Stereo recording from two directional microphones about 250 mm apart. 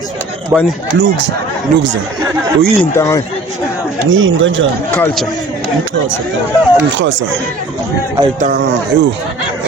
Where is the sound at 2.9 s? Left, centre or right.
Centre.